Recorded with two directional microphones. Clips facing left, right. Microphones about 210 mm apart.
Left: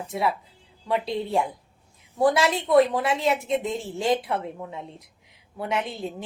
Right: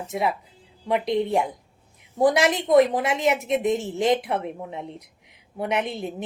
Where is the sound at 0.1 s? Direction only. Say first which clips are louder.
Right 1 dB; 15° right (ahead or behind).